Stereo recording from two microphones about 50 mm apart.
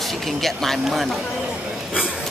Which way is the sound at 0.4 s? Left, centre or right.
Centre.